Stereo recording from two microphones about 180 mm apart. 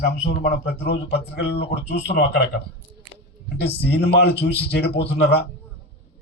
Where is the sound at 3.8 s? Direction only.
65° left (ahead or behind).